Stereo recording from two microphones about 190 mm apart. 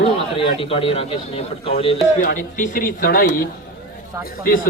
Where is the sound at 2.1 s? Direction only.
45° left (ahead or behind).